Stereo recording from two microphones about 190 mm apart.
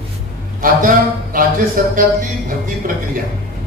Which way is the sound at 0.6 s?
50° right (ahead or behind).